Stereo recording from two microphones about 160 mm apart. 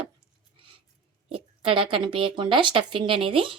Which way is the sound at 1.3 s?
30° right (ahead or behind).